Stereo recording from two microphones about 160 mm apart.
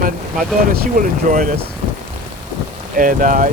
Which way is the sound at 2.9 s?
60° right (ahead or behind).